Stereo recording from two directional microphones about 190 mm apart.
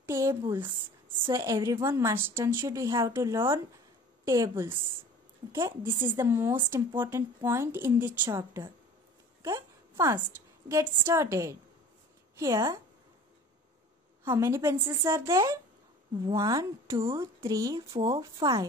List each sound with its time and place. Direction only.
0.0 s a woman's voice: 15° right (ahead or behind)
9.4 s a sound: 15° right (ahead or behind)
10.7 s a woman's voice: 15° right (ahead or behind)
14.2 s a woman's voice: 15° right (ahead or behind)